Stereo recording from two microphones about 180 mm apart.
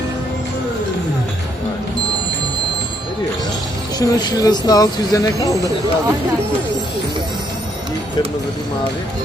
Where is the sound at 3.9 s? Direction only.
20° left (ahead or behind).